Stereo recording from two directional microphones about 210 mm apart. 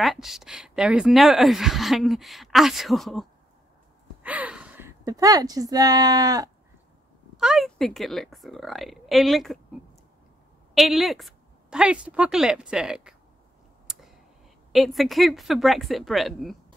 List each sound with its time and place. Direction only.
0.0 s speech: centre (ahead or behind); by 6.5 s 15° right (ahead or behind)
7.3 s a woman's voice: centre (ahead or behind)
13.9 s clicking: centre (ahead or behind)
14.7 s speech: centre (ahead or behind)